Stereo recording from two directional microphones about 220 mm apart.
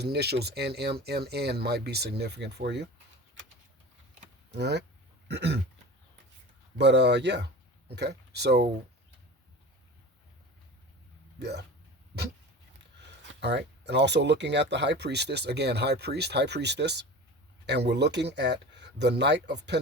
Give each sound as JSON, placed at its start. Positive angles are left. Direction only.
{"t": 0.0, "sound": "speech", "side_deg": -45}
{"t": 4.5, "sound": "speech", "side_deg": -50}
{"t": 6.7, "sound": "speech", "side_deg": -50}
{"t": 11.3, "sound": "speech", "side_deg": -50}
{"t": 13.4, "sound": "speech", "side_deg": -50}